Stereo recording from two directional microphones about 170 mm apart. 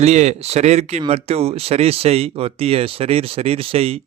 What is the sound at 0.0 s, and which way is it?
Speech, 40° right (ahead or behind).